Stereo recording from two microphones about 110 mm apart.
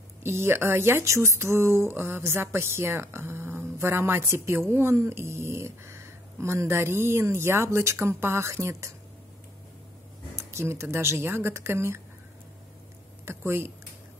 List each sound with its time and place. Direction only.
0.2 s speech: 25° right (ahead or behind)
10.5 s speech: 25° right (ahead or behind)
13.2 s a sound: 20° right (ahead or behind)